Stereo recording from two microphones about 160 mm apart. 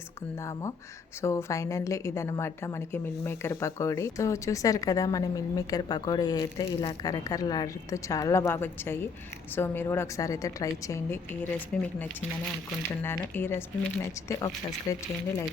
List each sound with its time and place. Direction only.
1.2 s a woman's voice: 15° left (ahead or behind)